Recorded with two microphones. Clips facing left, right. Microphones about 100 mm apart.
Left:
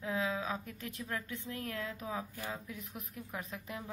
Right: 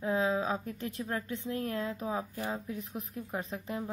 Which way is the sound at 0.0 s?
35° right (ahead or behind).